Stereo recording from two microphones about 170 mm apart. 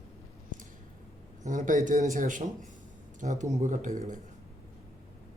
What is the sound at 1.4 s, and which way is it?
Speech, 50° right (ahead or behind).